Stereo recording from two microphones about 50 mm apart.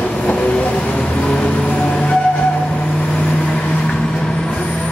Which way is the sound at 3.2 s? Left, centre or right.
Centre.